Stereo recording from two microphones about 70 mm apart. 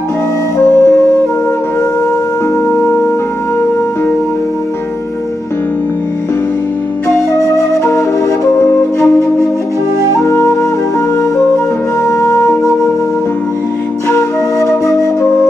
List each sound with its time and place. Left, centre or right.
0.7 s flute: left
7.3 s flute: left
8.5 s music: left
10.1 s flute: left
12.0 s flute: left
14.0 s flute: left